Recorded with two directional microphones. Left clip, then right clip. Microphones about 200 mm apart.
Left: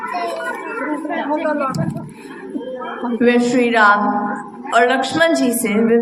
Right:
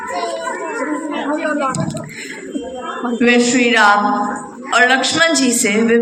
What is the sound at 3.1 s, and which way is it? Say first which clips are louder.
A woman's voice: right 1 dB; 15° left (ahead or behind).